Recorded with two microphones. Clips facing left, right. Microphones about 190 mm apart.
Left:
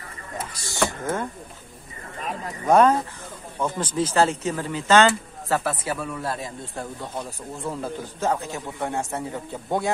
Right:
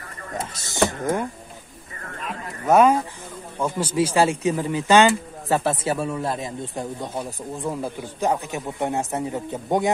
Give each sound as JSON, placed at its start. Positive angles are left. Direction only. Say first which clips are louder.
{"t": 0.4, "sound": "speech", "louder": "right 3 dB", "side_deg": -20}
{"t": 2.6, "sound": "speech", "louder": "right 1 dB", "side_deg": -5}
{"t": 5.6, "sound": "speech", "louder": "right 4 dB", "side_deg": -25}